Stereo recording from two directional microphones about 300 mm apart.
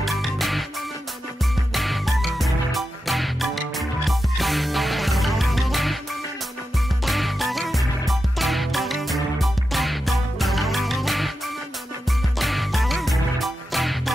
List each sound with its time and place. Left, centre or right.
0.0 s music: centre
1.7 s music: centre
7.1 s music: centre
12.4 s music: centre